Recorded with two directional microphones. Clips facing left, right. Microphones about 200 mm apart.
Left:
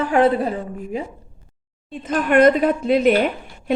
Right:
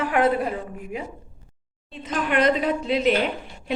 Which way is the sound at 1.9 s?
50° left (ahead or behind).